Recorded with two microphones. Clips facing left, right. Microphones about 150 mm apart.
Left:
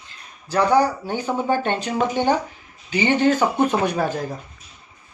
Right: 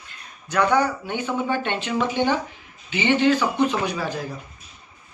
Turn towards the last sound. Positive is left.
turn(degrees=50)  # may be behind; listen again after turning